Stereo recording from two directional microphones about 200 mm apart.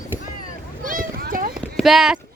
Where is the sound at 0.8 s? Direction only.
45° right (ahead or behind).